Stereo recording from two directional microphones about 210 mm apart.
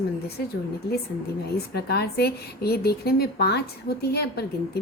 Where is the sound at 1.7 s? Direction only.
50° left (ahead or behind).